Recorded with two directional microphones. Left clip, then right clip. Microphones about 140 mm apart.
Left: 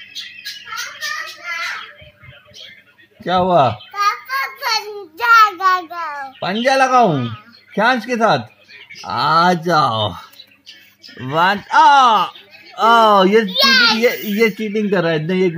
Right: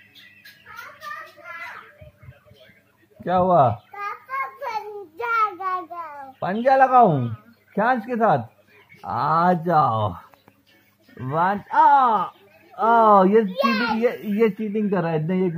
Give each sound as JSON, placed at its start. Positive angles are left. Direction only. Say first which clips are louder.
{"t": 3.3, "sound": "speech", "louder": "left 4 dB", "side_deg": -20}
{"t": 4.6, "sound": "child singing", "louder": "left 9 dB", "side_deg": -10}
{"t": 6.0, "sound": "a sound", "louder": "left 11 dB", "side_deg": 15}
{"t": 6.4, "sound": "speech", "louder": "left 2 dB", "side_deg": -20}
{"t": 11.2, "sound": "speech", "louder": "left 6 dB", "side_deg": -15}